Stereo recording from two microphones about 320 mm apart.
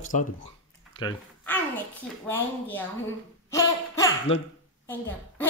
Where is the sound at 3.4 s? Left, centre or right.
Centre.